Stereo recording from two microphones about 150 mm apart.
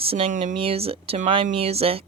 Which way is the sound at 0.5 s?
40° right (ahead or behind).